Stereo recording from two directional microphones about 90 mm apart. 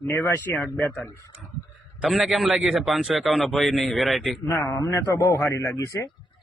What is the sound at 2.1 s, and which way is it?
A man's voice, centre (ahead or behind).